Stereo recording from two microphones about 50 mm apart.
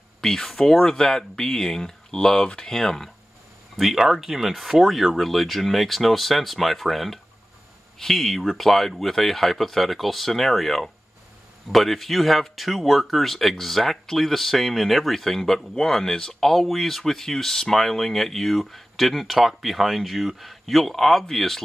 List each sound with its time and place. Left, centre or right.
0.2 s speech: centre
3.7 s speech: centre